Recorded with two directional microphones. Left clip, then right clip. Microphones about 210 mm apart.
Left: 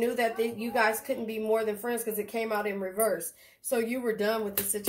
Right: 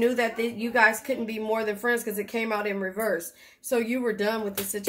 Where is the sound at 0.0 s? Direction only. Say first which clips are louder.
Right 3 dB; 35° right (ahead or behind).